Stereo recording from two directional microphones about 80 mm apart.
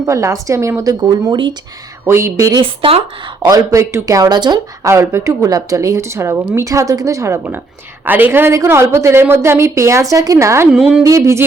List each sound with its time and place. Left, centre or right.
0.0 s a woman's voice: right
1.3 s speech: right
2.0 s a woman's voice: right
2.5 s speech: right
3.4 s speech: right
4.3 s speech: right
4.8 s a woman's voice: right
5.5 s a woman's voice: right
8.0 s a woman's voice: right
10.7 s a woman's voice: centre
11.0 s a woman's voice: right